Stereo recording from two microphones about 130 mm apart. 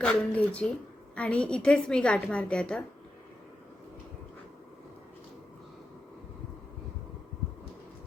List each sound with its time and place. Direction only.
0.0 s a woman's voice: 10° left (ahead or behind)